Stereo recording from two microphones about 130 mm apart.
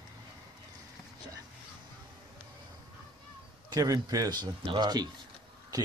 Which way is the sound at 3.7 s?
30° right (ahead or behind).